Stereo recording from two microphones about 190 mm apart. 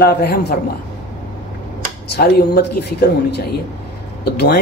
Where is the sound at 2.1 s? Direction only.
55° left (ahead or behind).